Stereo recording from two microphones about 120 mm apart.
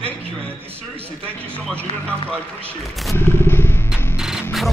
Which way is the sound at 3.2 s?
20° left (ahead or behind).